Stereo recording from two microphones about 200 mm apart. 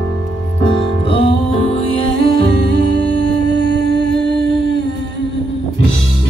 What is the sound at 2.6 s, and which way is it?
Music, 55° right (ahead or behind).